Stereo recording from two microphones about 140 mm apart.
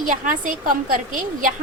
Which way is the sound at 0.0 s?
70° right (ahead or behind).